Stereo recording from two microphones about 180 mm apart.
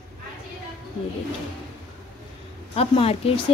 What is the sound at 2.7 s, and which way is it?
Speech, 30° left (ahead or behind).